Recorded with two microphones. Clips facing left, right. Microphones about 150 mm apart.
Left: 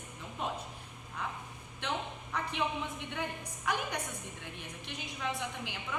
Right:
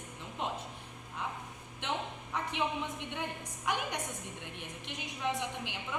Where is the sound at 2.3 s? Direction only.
20° right (ahead or behind).